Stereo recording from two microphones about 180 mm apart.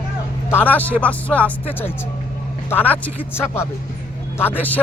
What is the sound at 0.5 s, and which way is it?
Speech, 10° left (ahead or behind).